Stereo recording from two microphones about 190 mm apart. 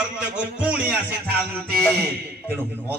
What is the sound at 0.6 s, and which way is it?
Music, 10° right (ahead or behind).